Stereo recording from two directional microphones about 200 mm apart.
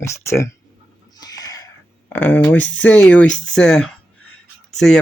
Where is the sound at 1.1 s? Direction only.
20° left (ahead or behind).